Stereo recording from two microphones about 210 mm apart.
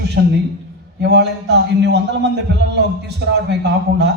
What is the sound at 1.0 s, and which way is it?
A man's voice, 55° right (ahead or behind).